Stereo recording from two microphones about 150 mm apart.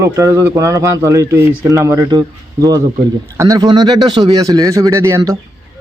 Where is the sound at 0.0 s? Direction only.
20° right (ahead or behind).